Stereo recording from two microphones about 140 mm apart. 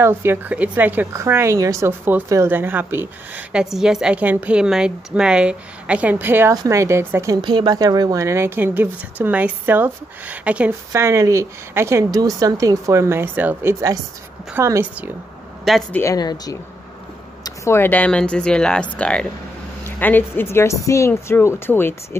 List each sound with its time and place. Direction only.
0.0 s a woman's voice: 15° right (ahead or behind)
7.4 s a woman's voice: 30° right (ahead or behind); by 10.7 s 10° right (ahead or behind)
10.9 s a woman's voice: 20° right (ahead or behind)
15.9 s speech: 20° left (ahead or behind)